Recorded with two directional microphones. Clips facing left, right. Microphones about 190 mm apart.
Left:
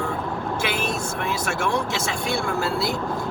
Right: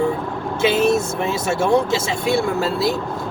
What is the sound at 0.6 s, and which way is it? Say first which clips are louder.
Speech: right 14 dB; 25° right (ahead or behind).